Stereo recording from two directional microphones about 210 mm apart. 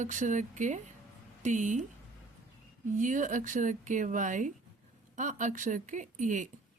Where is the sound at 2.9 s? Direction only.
40° right (ahead or behind).